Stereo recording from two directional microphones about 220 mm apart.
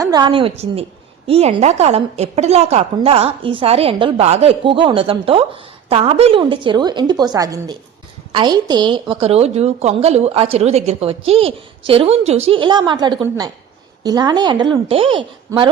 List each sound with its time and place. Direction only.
0.0 s a woman's voice: 20° right (ahead or behind)